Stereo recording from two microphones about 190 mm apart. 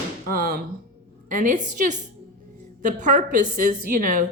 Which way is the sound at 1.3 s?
45° right (ahead or behind).